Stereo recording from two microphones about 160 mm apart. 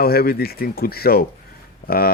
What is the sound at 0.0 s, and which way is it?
A man's voice, 70° left (ahead or behind).